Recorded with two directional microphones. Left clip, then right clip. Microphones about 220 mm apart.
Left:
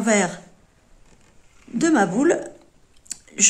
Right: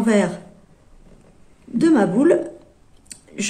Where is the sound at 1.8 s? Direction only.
35° left (ahead or behind).